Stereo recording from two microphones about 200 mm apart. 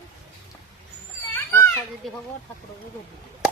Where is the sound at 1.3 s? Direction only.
15° left (ahead or behind).